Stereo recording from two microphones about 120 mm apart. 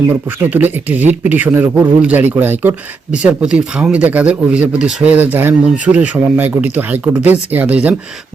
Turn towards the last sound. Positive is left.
turn(degrees=-15)  # may be behind; listen again after turning